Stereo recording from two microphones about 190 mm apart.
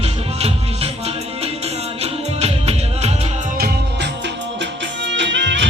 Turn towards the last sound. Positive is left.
turn(degrees=-70)  # may be behind; listen again after turning